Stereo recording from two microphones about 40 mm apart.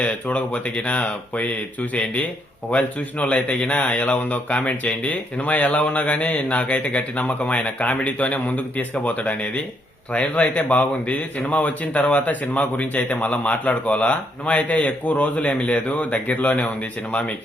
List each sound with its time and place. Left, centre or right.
0.0 s a man's voice: left
2.6 s a man's voice: left
3.5 s speech: left
3.8 s a man's voice: left
10.1 s a man's voice: left